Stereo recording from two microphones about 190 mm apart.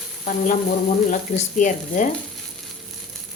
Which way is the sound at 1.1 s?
40° left (ahead or behind).